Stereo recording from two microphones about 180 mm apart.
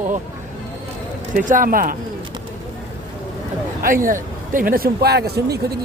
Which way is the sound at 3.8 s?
50° right (ahead or behind).